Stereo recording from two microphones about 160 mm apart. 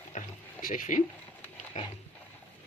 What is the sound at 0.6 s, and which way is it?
Speech, 55° left (ahead or behind).